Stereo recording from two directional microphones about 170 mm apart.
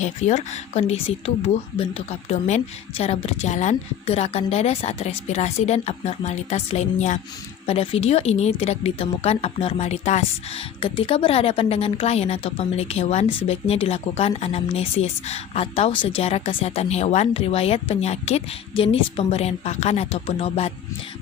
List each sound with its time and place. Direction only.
0.0 s a woman's voice: 45° left (ahead or behind)
3.0 s a woman's voice: 40° left (ahead or behind)
10.8 s a woman's voice: 30° left (ahead or behind)